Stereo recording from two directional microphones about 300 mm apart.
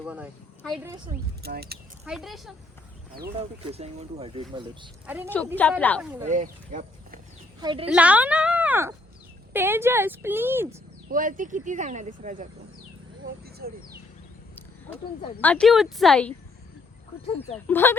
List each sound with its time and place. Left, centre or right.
0.0 s a woman's voice: centre
1.1 s speech: right
2.0 s a woman's voice: centre
3.2 s speech: right
5.5 s a woman's voice: centre
6.2 s speech: right
7.6 s speech: centre
7.9 s speech: centre
11.1 s speech: right
15.4 s a woman's voice: centre
17.7 s speech: centre